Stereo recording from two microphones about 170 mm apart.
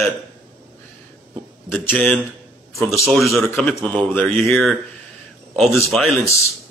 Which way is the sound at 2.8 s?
Centre (ahead or behind).